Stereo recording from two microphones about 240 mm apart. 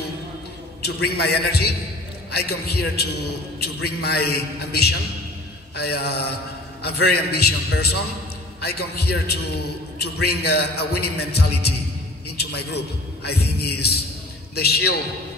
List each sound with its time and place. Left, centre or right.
0.8 s a man's voice: left
9.0 s a man's voice: left